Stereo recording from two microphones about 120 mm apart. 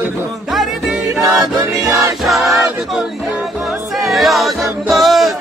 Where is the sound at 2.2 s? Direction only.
Centre (ahead or behind).